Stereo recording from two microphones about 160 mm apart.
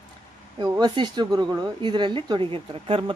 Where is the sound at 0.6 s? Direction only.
25° right (ahead or behind).